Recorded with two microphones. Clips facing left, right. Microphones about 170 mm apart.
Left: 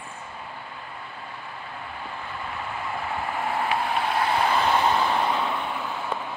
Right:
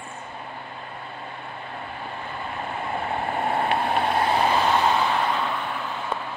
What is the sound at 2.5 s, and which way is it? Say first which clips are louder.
Vehicle: right 2 dB; 35° right (ahead or behind).